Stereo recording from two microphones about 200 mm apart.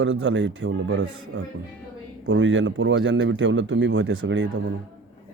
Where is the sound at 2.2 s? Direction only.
70° right (ahead or behind).